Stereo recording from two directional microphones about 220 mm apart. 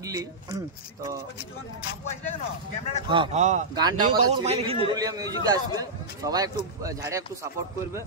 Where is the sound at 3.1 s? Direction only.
25° right (ahead or behind).